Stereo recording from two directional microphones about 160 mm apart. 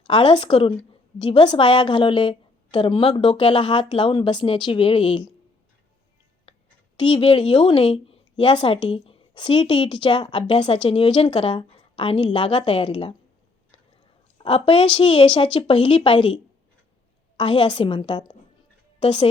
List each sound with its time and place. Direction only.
0.1 s a woman's voice: 30° left (ahead or behind)
7.0 s a woman's voice: 35° left (ahead or behind)
14.3 s a woman's voice: 35° left (ahead or behind)